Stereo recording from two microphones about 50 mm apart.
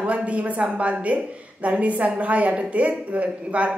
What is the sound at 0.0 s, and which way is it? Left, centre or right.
A woman's voice, right.